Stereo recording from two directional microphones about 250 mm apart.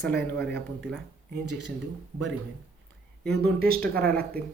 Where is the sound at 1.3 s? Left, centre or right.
Right.